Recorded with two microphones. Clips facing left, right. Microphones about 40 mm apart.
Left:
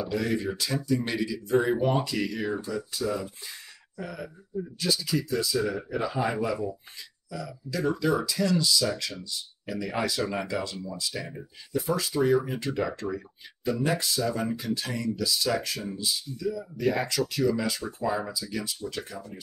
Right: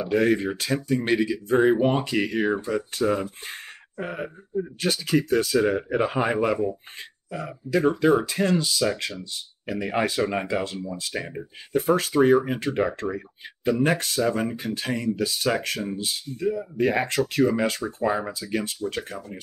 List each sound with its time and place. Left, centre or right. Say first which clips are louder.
0.0 s speech: right 7 dB; right